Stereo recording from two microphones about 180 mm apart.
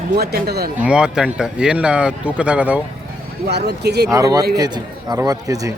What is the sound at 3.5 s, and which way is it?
Speech, 65° right (ahead or behind).